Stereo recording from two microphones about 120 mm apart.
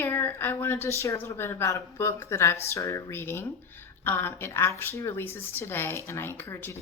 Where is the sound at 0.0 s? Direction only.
15° left (ahead or behind).